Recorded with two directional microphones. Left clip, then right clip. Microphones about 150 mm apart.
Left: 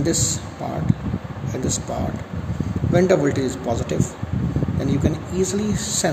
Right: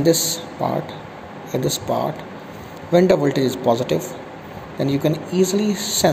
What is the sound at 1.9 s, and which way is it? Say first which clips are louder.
Speech: right 6 dB; 20° right (ahead or behind).